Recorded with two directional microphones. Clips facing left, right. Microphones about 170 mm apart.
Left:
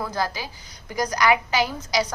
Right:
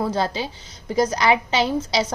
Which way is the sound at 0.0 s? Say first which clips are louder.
Right 5 dB; 25° right (ahead or behind).